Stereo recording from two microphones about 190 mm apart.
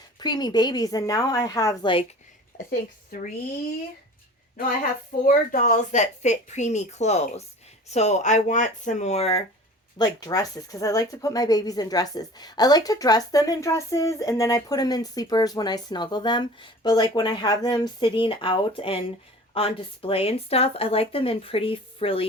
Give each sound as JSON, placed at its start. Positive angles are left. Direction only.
{"t": 0.2, "sound": "speech", "side_deg": 20}
{"t": 2.6, "sound": "a woman's voice", "side_deg": 50}
{"t": 5.2, "sound": "a woman's voice", "side_deg": 45}
{"t": 10.0, "sound": "speech", "side_deg": 20}